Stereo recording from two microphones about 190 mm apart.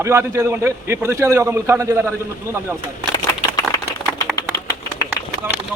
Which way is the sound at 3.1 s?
20° left (ahead or behind).